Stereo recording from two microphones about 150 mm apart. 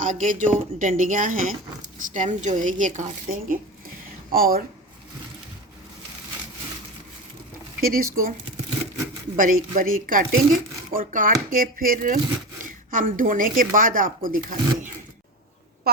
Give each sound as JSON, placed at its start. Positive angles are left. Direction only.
{"t": 0.0, "sound": "speech", "side_deg": -60}
{"t": 4.3, "sound": "speech", "side_deg": -75}
{"t": 7.8, "sound": "speech", "side_deg": -75}
{"t": 9.4, "sound": "speech", "side_deg": -65}